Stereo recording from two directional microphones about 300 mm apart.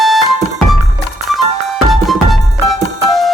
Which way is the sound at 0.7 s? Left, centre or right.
Centre.